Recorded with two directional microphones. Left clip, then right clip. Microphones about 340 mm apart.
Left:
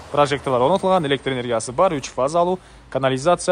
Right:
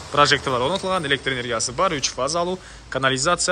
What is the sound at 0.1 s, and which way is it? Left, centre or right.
A man's voice, centre.